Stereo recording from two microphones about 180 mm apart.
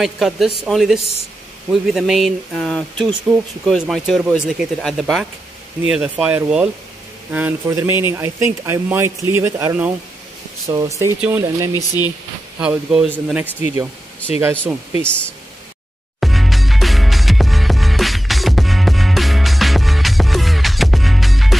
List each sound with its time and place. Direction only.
0.0 s speech: centre (ahead or behind)
16.2 s music: centre (ahead or behind)